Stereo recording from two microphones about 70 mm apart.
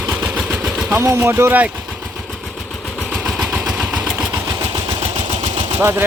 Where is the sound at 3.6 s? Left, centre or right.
Centre.